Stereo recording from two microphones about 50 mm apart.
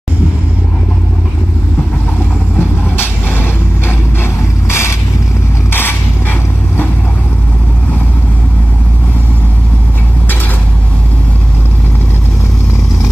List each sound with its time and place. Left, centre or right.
3.0 s vehicle: left
5.7 s mechanisms: left